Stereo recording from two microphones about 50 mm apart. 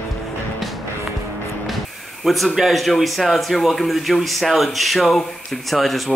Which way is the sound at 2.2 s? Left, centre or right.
Centre.